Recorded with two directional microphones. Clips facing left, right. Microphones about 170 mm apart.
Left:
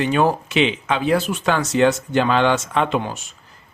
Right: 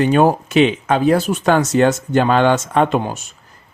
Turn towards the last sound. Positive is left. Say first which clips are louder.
# right 4 dB
turn(degrees=-45)  # may be behind; listen again after turning